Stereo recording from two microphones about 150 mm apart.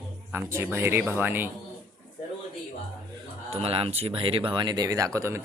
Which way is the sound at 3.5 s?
40° right (ahead or behind).